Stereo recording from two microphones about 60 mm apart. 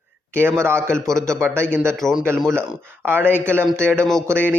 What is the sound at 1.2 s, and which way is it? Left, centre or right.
Speech, right.